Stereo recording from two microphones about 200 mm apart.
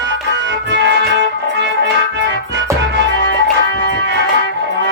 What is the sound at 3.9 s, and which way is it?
Music, 60° right (ahead or behind).